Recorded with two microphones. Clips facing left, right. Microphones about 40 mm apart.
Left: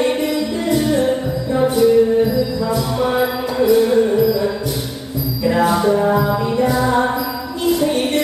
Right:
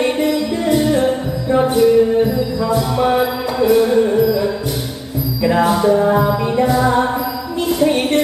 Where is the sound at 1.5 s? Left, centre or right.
Right.